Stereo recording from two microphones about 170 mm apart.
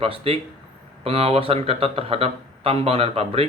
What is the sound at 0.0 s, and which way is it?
Speech, 35° right (ahead or behind).